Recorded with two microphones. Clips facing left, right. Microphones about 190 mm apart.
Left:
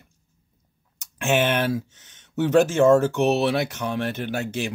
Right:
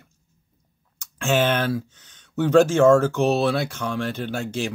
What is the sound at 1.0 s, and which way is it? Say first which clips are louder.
Speech: right 1 dB; 20° left (ahead or behind).